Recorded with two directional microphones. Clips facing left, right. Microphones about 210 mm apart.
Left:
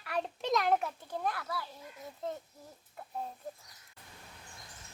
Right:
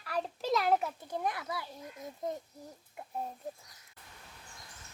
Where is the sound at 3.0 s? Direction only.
15° right (ahead or behind).